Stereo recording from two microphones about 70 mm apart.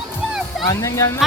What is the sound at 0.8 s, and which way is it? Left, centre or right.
Speech, left.